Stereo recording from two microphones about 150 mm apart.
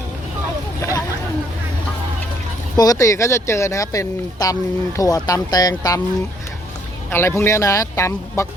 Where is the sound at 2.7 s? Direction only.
25° left (ahead or behind).